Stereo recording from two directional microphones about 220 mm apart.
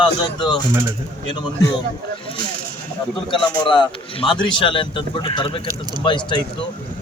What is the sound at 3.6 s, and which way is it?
Speech, 20° left (ahead or behind).